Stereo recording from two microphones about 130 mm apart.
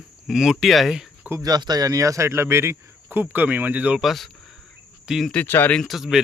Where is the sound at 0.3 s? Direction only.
5° right (ahead or behind).